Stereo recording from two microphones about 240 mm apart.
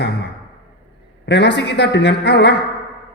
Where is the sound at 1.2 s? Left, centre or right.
Left.